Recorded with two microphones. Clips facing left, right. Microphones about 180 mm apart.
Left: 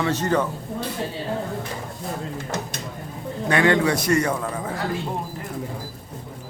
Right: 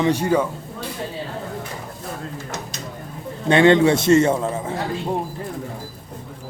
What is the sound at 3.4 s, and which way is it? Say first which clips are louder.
A man's voice: right 5 dB; 25° right (ahead or behind).